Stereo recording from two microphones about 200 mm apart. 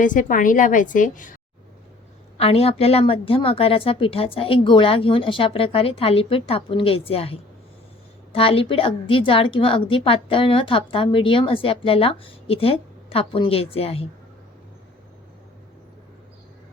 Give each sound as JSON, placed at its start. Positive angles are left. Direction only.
{"t": 0.0, "sound": "a woman's voice", "side_deg": 40}
{"t": 2.4, "sound": "a woman's voice", "side_deg": 30}